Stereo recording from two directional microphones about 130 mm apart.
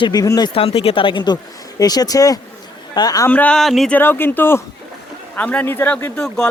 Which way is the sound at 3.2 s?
10° left (ahead or behind).